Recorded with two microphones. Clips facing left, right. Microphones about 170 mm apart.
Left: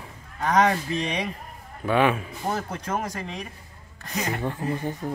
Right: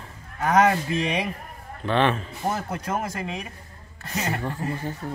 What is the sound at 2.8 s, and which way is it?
Speech, 10° right (ahead or behind).